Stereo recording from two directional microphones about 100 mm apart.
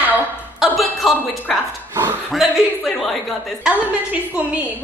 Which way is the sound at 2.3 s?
Centre (ahead or behind).